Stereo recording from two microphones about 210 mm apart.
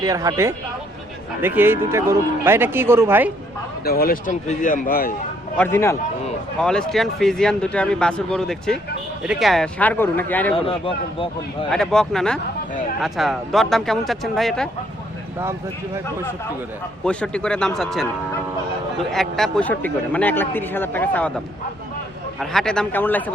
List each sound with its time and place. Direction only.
0.0 s speech: 15° right (ahead or behind)
3.8 s speech: 45° left (ahead or behind)
5.5 s a man's voice: 10° left (ahead or behind)
10.5 s speech: 25° left (ahead or behind)
11.7 s speech: 5° left (ahead or behind)
17.0 s speech: 5° left (ahead or behind)
19.1 s a man's voice: centre (ahead or behind)
22.4 s speech: centre (ahead or behind)